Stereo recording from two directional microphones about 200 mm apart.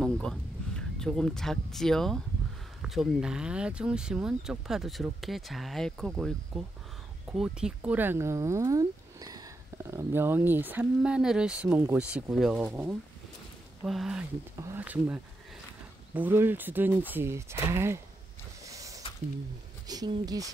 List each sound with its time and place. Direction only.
0.0 s speech: 5° left (ahead or behind); by 18.0 s 15° right (ahead or behind)
18.6 s a sound: 15° right (ahead or behind)
19.9 s speech: 20° right (ahead or behind)